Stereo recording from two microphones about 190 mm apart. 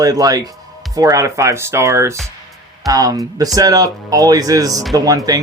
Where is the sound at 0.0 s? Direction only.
20° right (ahead or behind).